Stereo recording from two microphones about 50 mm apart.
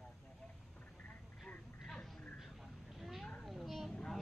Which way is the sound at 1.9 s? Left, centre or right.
Centre.